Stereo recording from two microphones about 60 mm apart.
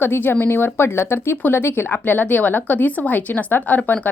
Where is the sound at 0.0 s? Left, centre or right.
Left.